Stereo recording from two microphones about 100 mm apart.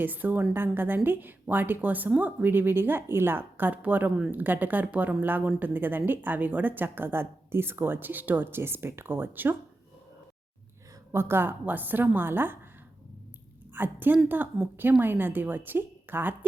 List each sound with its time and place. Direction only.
0.0 s a woman's voice: 20° right (ahead or behind)
11.1 s a woman's voice: 25° right (ahead or behind)
13.7 s a woman's voice: 20° right (ahead or behind)